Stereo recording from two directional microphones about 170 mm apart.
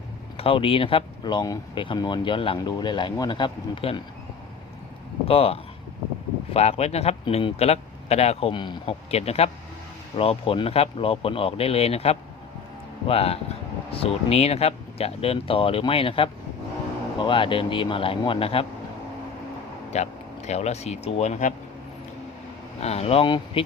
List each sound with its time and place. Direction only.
0.3 s speech: 30° left (ahead or behind)
5.2 s speech: 35° left (ahead or behind)
19.9 s speech: 40° left (ahead or behind)
22.8 s speech: 40° left (ahead or behind)